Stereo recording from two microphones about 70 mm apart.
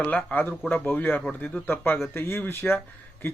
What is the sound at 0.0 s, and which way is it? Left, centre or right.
Speech, left.